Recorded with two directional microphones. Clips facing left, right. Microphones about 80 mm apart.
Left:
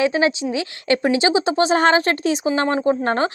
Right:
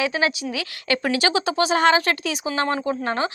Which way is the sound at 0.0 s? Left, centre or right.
Left.